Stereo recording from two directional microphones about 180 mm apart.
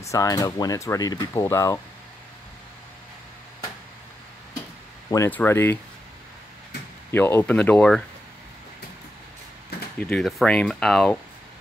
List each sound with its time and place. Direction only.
0.0 s speech: 20° left (ahead or behind)
5.1 s speech: 15° left (ahead or behind)
7.1 s speech: 15° left (ahead or behind)
9.9 s speech: 5° left (ahead or behind)